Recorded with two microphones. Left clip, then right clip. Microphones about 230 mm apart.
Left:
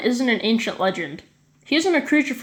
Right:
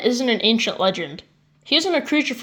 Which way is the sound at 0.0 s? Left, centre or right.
Centre.